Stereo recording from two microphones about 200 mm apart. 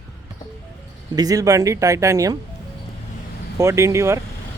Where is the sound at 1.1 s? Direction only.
20° right (ahead or behind).